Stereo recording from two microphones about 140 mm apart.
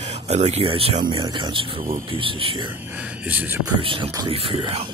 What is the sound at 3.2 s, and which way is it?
Speech, 10° right (ahead or behind).